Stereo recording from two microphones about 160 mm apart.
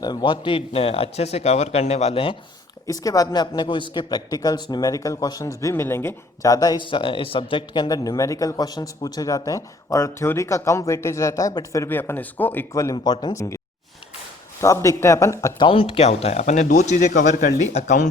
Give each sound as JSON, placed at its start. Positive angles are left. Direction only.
{"t": 0.0, "sound": "speech", "side_deg": 25}
{"t": 2.8, "sound": "a man's voice", "side_deg": 20}
{"t": 14.6, "sound": "speech", "side_deg": 20}